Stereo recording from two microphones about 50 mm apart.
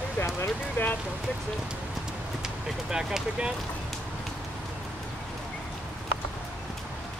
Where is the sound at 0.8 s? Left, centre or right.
Left.